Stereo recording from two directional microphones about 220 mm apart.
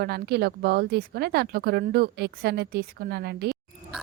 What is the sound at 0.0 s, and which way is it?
A woman's voice, 45° right (ahead or behind).